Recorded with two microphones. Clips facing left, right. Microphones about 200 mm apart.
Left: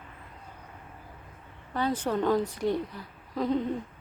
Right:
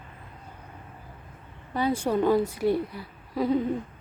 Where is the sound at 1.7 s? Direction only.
10° right (ahead or behind).